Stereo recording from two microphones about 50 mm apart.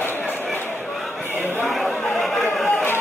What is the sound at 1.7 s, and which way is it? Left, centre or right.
Chatter, centre.